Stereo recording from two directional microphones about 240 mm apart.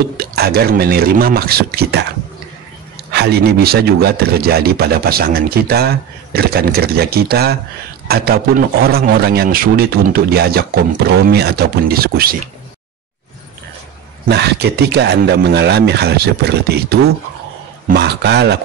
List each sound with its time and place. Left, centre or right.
0.2 s speech: right
3.1 s speech: right
14.2 s speech: right